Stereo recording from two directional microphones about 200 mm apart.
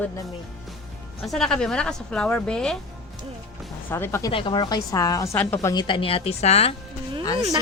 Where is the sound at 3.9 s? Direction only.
15° left (ahead or behind).